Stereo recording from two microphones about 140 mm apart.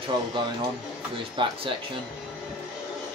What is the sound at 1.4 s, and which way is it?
Speech, 35° right (ahead or behind).